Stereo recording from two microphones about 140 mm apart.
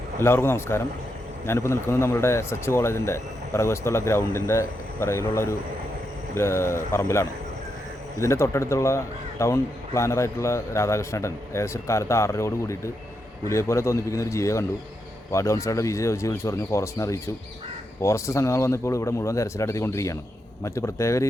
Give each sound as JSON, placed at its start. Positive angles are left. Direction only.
{"t": 0.2, "sound": "a man's voice", "side_deg": 15}